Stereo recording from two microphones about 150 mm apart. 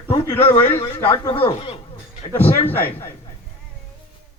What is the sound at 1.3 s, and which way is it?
Speech, 35° left (ahead or behind).